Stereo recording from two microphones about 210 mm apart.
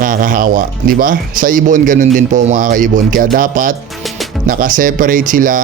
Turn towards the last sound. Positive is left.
turn(degrees=-40)  # may be behind; listen again after turning